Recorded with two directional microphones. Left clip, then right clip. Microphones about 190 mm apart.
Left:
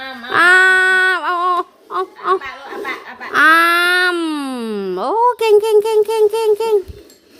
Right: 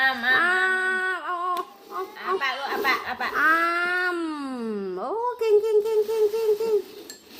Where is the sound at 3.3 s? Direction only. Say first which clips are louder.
Left 11 dB; 55° left (ahead or behind).